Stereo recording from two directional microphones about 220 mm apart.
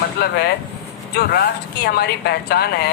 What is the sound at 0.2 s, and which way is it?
A woman's voice, 45° left (ahead or behind).